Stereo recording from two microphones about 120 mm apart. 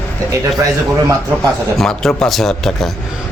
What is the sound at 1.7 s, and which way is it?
Speech, 5° left (ahead or behind).